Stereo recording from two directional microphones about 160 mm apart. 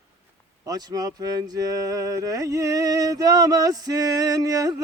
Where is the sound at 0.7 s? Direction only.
25° right (ahead or behind).